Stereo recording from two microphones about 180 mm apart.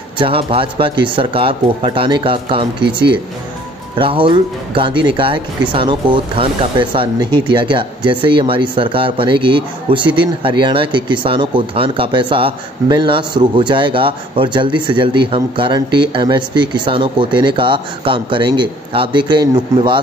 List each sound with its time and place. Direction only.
0.2 s speech: 30° right (ahead or behind)